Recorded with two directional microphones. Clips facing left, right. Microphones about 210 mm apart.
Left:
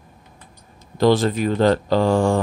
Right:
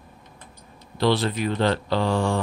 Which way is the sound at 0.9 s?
45° left (ahead or behind).